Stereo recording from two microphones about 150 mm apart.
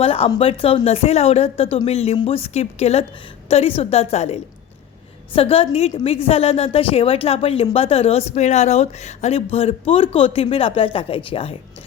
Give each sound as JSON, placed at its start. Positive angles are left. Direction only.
{"t": 0.0, "sound": "a woman's voice", "side_deg": 40}